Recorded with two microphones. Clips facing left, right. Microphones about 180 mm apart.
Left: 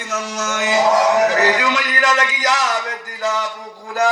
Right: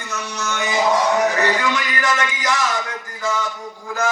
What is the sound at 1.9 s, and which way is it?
Speech, 40° left (ahead or behind).